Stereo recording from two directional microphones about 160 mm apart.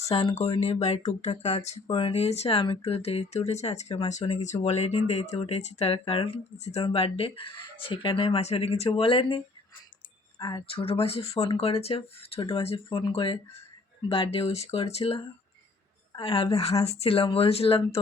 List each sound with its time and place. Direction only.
0.0 s speech: 40° left (ahead or behind)